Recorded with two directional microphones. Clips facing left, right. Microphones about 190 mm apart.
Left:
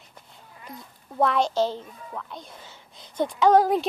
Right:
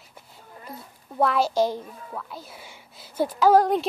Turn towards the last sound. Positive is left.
turn(degrees=0)  # may be behind; listen again after turning